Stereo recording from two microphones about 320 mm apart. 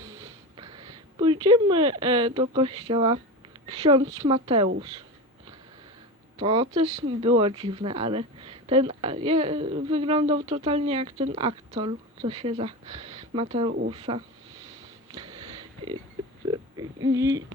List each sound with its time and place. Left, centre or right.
0.0 s speech: centre
6.4 s speech: centre
15.1 s a sound: centre
17.2 s speech: centre